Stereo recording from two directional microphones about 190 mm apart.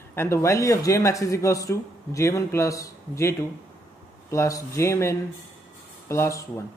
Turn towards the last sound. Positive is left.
turn(degrees=15)  # may be behind; listen again after turning